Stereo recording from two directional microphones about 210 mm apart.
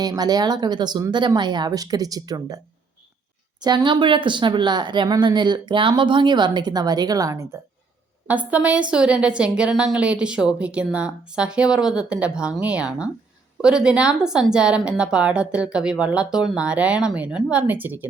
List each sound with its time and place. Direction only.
0.0 s speech: 20° right (ahead or behind)
3.6 s a woman's voice: 20° right (ahead or behind)